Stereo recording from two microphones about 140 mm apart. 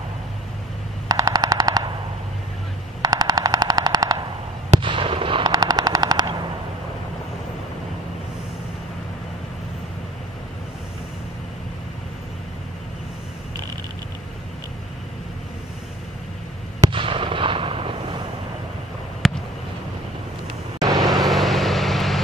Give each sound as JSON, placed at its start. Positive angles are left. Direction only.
{"t": 1.0, "sound": "machine gun", "side_deg": -30}
{"t": 3.0, "sound": "machine gun", "side_deg": -30}
{"t": 16.9, "sound": "artillery fire", "side_deg": -40}
{"t": 19.2, "sound": "a sound", "side_deg": 0}
{"t": 21.2, "sound": "vehicle", "side_deg": 0}